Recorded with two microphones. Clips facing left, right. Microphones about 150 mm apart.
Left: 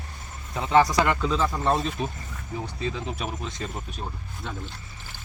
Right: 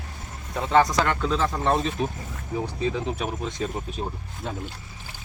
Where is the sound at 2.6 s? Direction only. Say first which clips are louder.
Right 4 dB; 15° right (ahead or behind).